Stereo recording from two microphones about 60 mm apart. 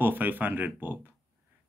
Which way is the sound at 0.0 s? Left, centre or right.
Right.